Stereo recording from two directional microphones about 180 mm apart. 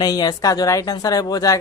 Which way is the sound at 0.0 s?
20° left (ahead or behind).